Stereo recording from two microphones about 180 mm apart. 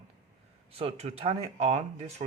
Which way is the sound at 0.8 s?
35° right (ahead or behind).